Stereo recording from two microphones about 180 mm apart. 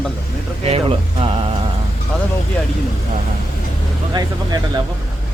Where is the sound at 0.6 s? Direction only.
35° right (ahead or behind).